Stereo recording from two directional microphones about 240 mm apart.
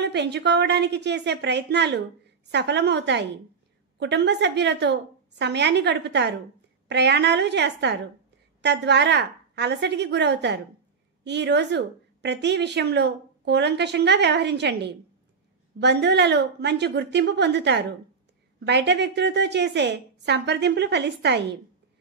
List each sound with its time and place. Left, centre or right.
0.0 s a woman's voice: right